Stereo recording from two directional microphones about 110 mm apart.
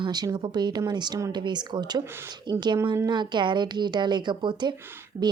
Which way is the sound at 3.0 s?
45° right (ahead or behind).